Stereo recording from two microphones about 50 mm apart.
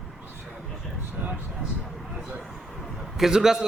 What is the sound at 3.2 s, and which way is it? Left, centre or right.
Speech, centre.